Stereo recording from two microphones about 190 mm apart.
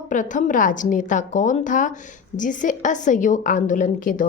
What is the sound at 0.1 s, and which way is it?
A woman's voice, 40° left (ahead or behind).